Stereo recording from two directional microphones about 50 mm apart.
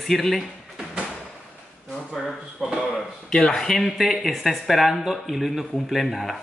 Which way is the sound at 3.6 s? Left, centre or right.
Centre.